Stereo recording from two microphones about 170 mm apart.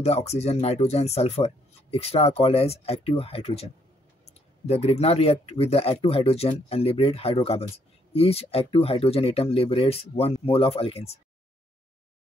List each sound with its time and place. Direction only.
0.0 s speech: 40° left (ahead or behind)